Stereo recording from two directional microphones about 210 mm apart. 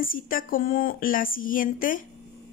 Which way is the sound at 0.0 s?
40° left (ahead or behind).